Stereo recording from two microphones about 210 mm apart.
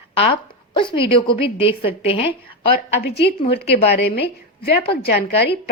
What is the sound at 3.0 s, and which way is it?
A woman's voice, 50° left (ahead or behind).